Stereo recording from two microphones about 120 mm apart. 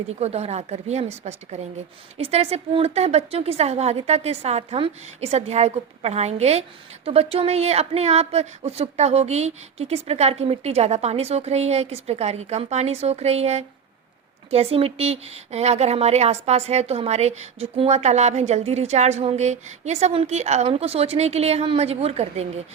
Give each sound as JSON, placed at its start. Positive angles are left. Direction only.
{"t": 0.2, "sound": "a woman's voice", "side_deg": -60}
{"t": 2.1, "sound": "a woman's voice", "side_deg": -60}